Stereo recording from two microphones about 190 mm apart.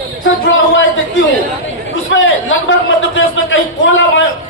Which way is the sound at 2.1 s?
90° left.